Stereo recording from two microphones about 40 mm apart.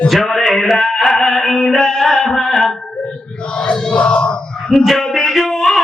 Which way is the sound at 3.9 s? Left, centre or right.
Left.